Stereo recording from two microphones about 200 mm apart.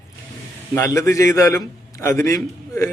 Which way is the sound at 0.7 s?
15° left (ahead or behind).